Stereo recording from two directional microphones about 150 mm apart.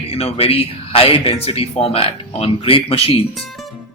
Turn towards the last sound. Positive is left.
turn(degrees=0)  # may be behind; listen again after turning